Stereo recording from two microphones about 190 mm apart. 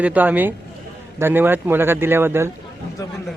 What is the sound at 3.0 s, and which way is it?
Speech, 15° left (ahead or behind).